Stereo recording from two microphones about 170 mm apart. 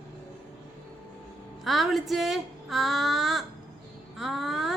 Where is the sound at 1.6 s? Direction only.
Centre (ahead or behind).